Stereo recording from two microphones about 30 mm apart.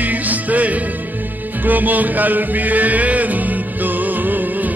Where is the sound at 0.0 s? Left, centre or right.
Right.